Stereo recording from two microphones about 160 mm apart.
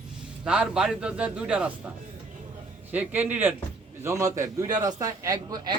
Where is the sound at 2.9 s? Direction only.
10° right (ahead or behind).